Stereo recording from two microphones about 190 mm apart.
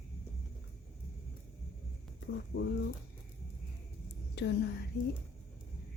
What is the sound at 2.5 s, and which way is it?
Speech, 65° left (ahead or behind).